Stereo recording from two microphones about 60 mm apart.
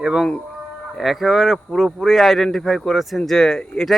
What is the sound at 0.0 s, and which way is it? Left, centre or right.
A man's voice, centre.